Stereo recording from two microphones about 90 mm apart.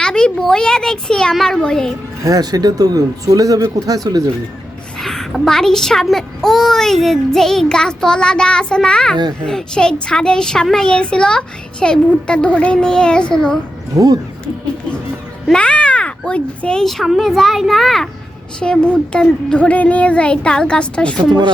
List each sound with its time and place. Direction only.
0.0 s speech: 10° left (ahead or behind)
2.2 s speech: 45° right (ahead or behind)
4.9 s a child's voice: 5° left (ahead or behind)
13.9 s speech: 40° right (ahead or behind)
15.5 s a child's voice: 10° left (ahead or behind)
21.2 s speech: 55° right (ahead or behind)